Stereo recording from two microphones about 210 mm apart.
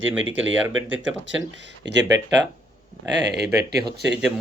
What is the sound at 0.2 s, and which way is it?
Speech, 65° right (ahead or behind).